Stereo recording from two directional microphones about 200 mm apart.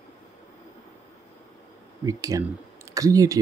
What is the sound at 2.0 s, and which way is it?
Speech, 15° right (ahead or behind).